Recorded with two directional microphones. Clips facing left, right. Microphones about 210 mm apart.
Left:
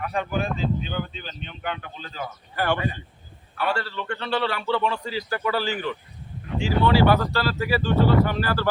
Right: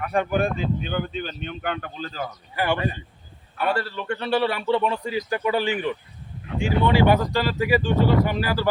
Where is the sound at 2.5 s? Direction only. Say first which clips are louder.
Right 1 dB; 10° right (ahead or behind).